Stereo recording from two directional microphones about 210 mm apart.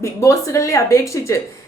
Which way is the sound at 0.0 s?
15° left (ahead or behind).